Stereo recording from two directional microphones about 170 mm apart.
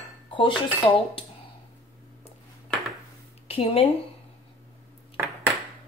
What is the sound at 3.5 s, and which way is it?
Speech, 35° left (ahead or behind).